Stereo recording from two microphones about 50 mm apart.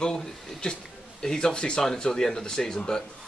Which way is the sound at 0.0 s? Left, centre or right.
Centre.